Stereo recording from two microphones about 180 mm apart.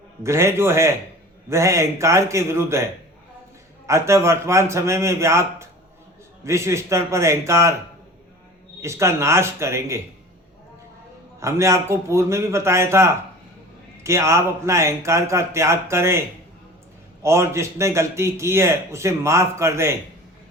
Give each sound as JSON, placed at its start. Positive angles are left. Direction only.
{"t": 0.2, "sound": "a man's voice", "side_deg": -15}
{"t": 3.8, "sound": "a man's voice", "side_deg": -15}
{"t": 8.8, "sound": "a man's voice", "side_deg": -15}
{"t": 11.3, "sound": "a man's voice", "side_deg": -15}
{"t": 17.2, "sound": "a man's voice", "side_deg": -15}